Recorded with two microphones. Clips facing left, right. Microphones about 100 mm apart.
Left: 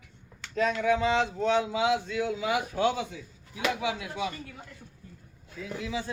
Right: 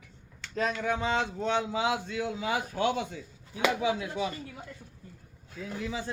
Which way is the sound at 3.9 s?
35° right (ahead or behind).